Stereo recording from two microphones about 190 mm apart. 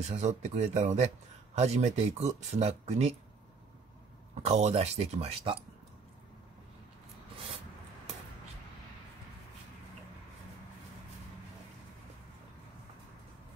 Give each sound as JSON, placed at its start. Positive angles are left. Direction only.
{"t": 0.0, "sound": "speech", "side_deg": -35}
{"t": 4.5, "sound": "speech", "side_deg": -35}